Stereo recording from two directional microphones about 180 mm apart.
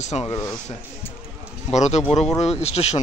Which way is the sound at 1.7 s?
40° left (ahead or behind).